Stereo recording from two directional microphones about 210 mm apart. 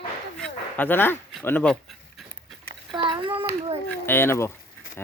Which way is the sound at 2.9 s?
25° right (ahead or behind).